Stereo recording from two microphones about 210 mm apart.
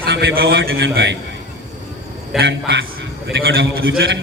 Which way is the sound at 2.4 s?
55° right (ahead or behind).